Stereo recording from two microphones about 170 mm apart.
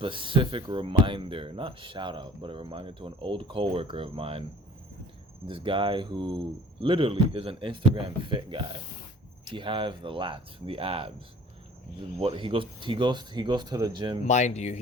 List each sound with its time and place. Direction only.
0.0 s speech: 30° right (ahead or behind)
5.5 s speech: 30° right (ahead or behind)
12.2 s speech: 30° right (ahead or behind)
14.3 s speech: 45° left (ahead or behind)